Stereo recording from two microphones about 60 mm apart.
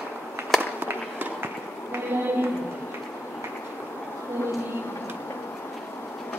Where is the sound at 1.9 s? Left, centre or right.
Right.